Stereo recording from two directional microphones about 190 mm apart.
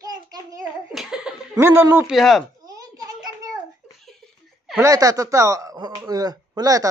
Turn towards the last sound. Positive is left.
turn(degrees=-20)  # may be behind; listen again after turning